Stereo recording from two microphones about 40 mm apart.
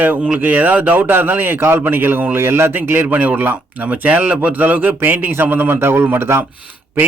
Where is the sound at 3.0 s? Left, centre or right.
Right.